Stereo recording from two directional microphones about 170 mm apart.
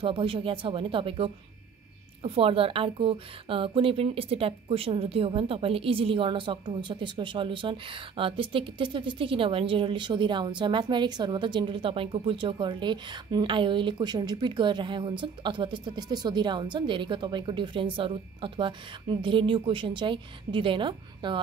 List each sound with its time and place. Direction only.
0.0 s a woman's voice: 30° right (ahead or behind)